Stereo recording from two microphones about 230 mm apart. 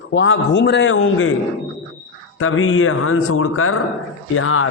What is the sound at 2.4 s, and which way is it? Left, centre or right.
Speech, left.